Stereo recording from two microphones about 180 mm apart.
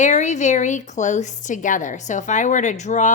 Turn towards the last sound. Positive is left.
turn(degrees=40)  # may be behind; listen again after turning